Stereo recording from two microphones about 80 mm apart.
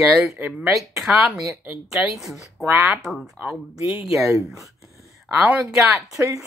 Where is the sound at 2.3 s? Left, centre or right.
Right.